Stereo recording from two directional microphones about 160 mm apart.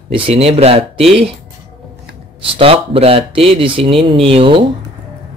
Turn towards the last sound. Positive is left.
turn(degrees=-35)  # may be behind; listen again after turning